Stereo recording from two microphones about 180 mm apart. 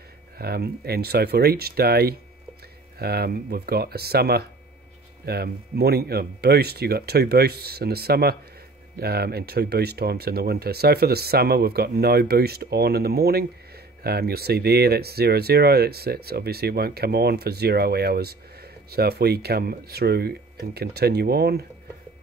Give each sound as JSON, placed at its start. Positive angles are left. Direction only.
{"t": 0.4, "sound": "speech", "side_deg": -60}